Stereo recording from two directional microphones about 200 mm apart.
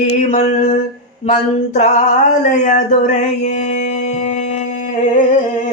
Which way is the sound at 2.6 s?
40° left (ahead or behind).